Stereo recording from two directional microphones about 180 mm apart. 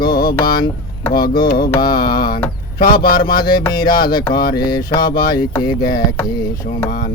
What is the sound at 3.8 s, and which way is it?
Speech, 55° left (ahead or behind).